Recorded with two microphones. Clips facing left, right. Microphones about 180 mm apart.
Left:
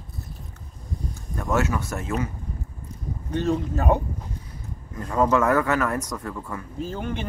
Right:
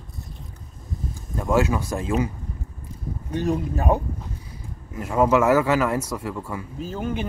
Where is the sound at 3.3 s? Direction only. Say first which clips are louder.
Even; 15° right (ahead or behind).